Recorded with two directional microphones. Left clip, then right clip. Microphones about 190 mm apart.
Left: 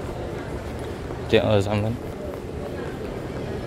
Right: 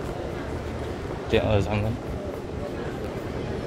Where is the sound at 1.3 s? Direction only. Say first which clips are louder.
Left 4 dB; 25° left (ahead or behind).